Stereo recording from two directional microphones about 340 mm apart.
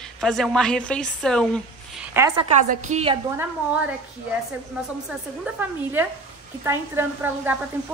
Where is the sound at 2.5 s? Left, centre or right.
Right.